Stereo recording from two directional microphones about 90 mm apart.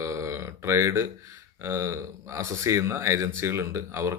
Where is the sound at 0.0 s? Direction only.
35° right (ahead or behind).